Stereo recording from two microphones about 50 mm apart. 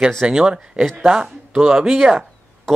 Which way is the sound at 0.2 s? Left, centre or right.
Centre.